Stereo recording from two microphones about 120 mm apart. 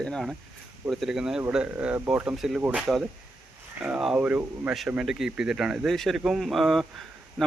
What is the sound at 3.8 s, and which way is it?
Speech, 5° right (ahead or behind).